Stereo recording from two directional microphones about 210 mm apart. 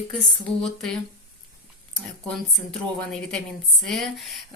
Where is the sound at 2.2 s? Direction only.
5° left (ahead or behind).